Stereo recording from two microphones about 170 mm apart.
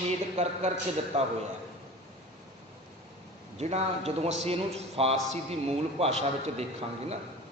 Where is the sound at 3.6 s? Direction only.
40° right (ahead or behind).